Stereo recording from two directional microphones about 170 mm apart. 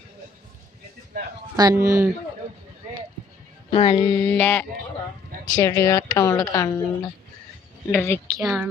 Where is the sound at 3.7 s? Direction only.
30° left (ahead or behind).